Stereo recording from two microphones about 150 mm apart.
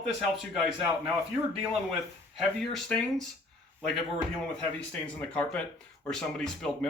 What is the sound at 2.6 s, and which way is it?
Speech, 5° left (ahead or behind).